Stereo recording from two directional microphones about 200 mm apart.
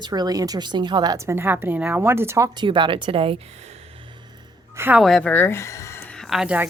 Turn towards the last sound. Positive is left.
turn(degrees=-5)  # may be behind; listen again after turning